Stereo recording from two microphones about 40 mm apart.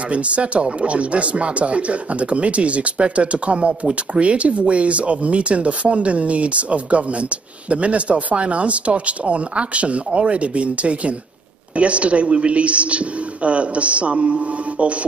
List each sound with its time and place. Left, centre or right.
0.1 s speech: right